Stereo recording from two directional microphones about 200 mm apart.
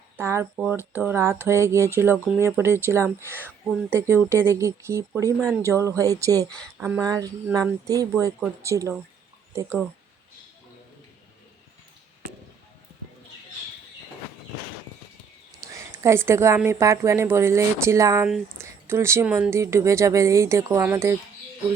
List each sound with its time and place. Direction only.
0.2 s speech: 10° right (ahead or behind)
6.5 s speech: 5° left (ahead or behind)
6.8 s speech: 10° right (ahead or behind)
15.8 s speech: 10° right (ahead or behind)